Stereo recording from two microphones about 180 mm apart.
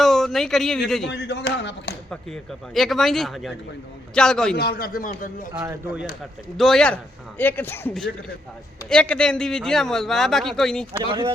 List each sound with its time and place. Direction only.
0.0 s speech: centre (ahead or behind)
1.0 s speech: 70° left (ahead or behind)
2.0 s a man's voice: centre (ahead or behind)
4.5 s a man's voice: 60° left (ahead or behind)
5.5 s speech: 10° right (ahead or behind)
6.6 s a man's voice: 5° left (ahead or behind)